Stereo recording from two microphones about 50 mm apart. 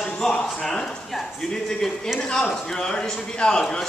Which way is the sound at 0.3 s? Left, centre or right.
Centre.